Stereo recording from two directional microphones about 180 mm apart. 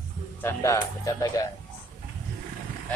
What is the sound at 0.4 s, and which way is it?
Speech, 15° left (ahead or behind).